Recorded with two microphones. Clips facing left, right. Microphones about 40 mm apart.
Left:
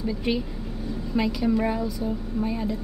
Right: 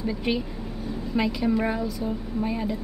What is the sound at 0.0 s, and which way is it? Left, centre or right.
Speech, centre.